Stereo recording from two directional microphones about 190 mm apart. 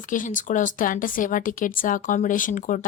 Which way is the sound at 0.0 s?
45° left (ahead or behind).